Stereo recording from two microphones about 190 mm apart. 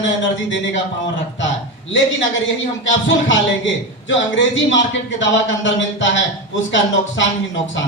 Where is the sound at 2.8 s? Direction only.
75° left (ahead or behind).